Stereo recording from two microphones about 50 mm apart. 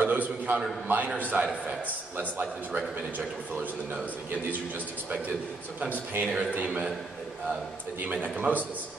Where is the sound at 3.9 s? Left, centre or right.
Right.